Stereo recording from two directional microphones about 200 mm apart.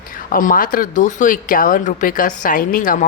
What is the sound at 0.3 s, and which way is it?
Speech, 45° left (ahead or behind).